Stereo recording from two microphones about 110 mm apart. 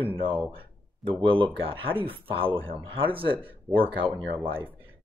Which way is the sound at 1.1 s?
55° right (ahead or behind).